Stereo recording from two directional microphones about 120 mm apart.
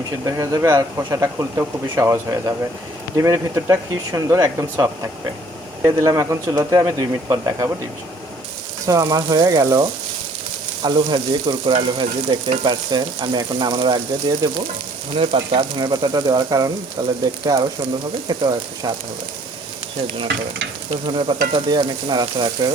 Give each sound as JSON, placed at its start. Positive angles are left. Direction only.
{"t": 0.3, "sound": "speech", "side_deg": -30}
{"t": 8.9, "sound": "frying", "side_deg": -30}
{"t": 10.8, "sound": "frying", "side_deg": -40}
{"t": 15.2, "sound": "frying", "side_deg": -45}
{"t": 15.9, "sound": "frying", "side_deg": -35}
{"t": 18.3, "sound": "frying", "side_deg": -35}
{"t": 20.9, "sound": "frying", "side_deg": -45}